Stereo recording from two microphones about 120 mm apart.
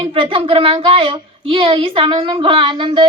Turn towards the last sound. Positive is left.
turn(degrees=-45)  # may be behind; listen again after turning